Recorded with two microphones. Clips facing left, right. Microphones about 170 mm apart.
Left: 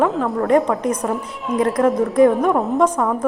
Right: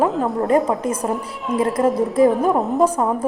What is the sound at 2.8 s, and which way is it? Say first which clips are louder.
Speech: right 1 dB; 25° right (ahead or behind).